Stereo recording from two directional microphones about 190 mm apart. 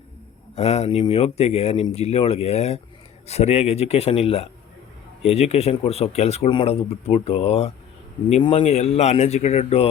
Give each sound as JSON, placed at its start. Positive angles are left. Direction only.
{"t": 0.5, "sound": "speech", "side_deg": 35}